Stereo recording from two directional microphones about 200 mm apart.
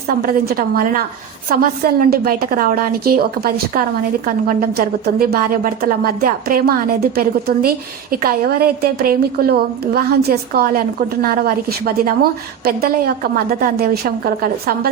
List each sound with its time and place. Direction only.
0.2 s a woman's voice: 45° right (ahead or behind)
13.5 s a woman's voice: 50° right (ahead or behind)